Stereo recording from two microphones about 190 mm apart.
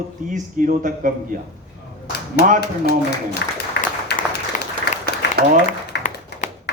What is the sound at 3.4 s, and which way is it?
Speech, 65° left (ahead or behind).